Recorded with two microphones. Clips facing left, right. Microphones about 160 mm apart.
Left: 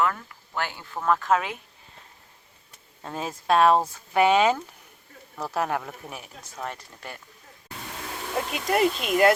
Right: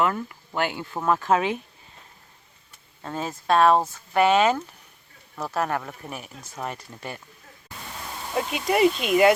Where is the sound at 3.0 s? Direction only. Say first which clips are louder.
Right 2 dB; 5° left (ahead or behind); by 7.2 s 15° right (ahead or behind).